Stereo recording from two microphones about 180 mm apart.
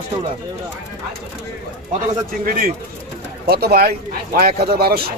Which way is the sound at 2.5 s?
50° right (ahead or behind).